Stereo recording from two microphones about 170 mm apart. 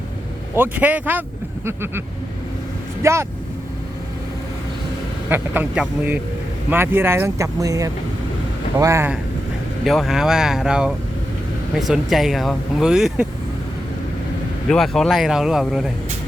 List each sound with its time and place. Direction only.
0.5 s speech: 10° right (ahead or behind)
5.3 s speech: 10° right (ahead or behind)
9.8 s speech: centre (ahead or behind)
14.7 s speech: centre (ahead or behind)